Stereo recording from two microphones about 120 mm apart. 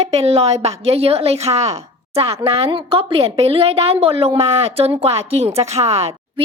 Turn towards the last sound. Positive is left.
turn(degrees=-65)  # may be behind; listen again after turning